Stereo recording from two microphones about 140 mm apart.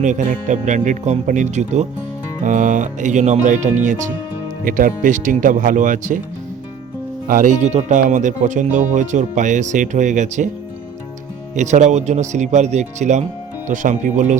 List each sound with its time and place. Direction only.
0.0 s speech: 65° right (ahead or behind)
2.4 s speech: 65° right (ahead or behind)
4.6 s speech: 75° right (ahead or behind)
7.3 s speech: 80° right
7.6 s speech: 55° right (ahead or behind)
11.5 s speech: 60° right (ahead or behind)